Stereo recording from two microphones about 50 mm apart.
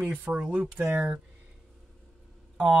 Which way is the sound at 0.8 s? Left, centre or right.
Right.